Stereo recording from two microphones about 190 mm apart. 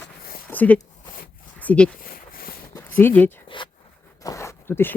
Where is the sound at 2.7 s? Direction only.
10° left (ahead or behind).